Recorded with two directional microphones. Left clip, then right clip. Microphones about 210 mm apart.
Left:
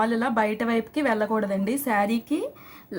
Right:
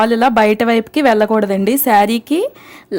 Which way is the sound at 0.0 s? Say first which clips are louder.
Right 12 dB; 50° right (ahead or behind).